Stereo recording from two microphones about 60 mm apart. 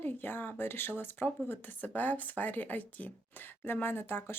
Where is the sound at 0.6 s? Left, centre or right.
Left.